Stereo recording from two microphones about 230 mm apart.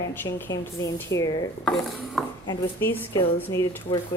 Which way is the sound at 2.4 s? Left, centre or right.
Centre.